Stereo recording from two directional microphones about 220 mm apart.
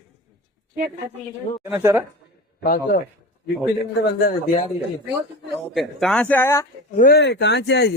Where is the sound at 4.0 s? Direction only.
45° left (ahead or behind).